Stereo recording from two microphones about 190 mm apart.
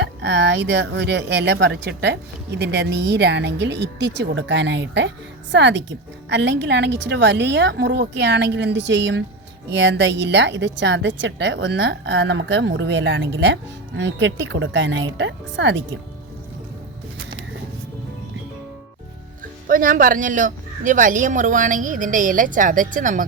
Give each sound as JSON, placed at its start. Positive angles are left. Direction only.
{"t": 0.2, "sound": "a woman's voice", "side_deg": -65}
{"t": 19.6, "sound": "speech", "side_deg": -45}